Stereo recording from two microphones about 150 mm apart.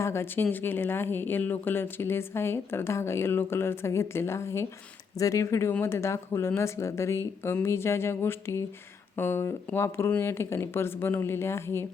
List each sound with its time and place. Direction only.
0.0 s speech: 15° left (ahead or behind)